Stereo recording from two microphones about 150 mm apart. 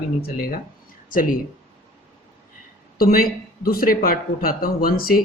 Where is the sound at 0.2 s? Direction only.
80° left.